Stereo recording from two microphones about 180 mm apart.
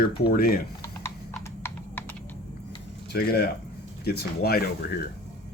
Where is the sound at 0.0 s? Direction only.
55° left (ahead or behind).